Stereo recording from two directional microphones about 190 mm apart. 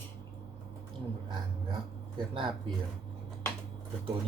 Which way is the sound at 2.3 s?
25° right (ahead or behind).